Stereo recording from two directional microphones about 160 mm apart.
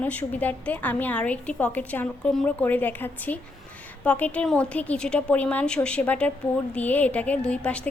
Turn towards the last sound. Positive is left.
turn(degrees=5)  # may be behind; listen again after turning